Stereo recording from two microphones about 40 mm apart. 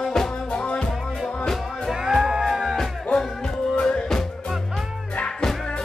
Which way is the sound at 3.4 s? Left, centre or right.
Centre.